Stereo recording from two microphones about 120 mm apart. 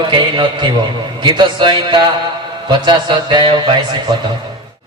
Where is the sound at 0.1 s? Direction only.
40° right (ahead or behind).